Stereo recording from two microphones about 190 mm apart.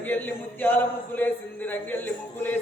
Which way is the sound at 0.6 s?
10° left (ahead or behind).